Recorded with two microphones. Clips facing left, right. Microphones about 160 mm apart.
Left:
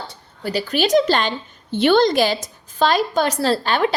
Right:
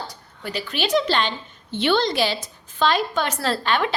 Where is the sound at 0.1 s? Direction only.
35° left (ahead or behind).